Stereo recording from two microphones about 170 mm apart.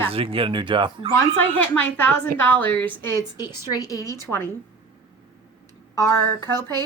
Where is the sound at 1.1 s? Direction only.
10° left (ahead or behind).